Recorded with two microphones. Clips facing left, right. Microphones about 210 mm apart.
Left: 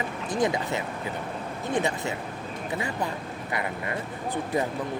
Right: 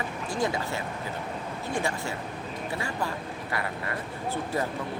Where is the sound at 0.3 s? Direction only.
20° left (ahead or behind).